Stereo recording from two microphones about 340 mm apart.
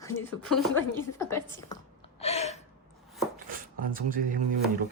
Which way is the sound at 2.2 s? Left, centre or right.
Centre.